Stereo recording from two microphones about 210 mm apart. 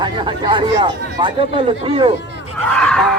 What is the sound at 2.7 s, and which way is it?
Screaming, 5° left (ahead or behind).